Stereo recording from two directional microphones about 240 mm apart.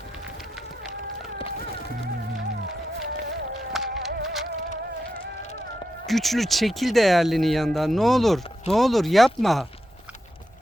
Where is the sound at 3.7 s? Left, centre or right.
Centre.